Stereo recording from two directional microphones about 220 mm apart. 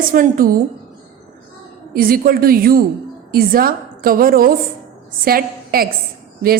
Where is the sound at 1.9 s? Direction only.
40° right (ahead or behind).